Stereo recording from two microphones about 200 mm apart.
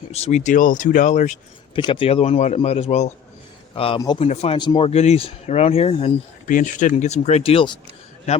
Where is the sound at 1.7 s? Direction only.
25° left (ahead or behind).